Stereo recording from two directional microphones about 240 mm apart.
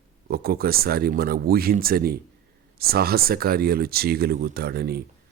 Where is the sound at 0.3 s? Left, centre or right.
Right.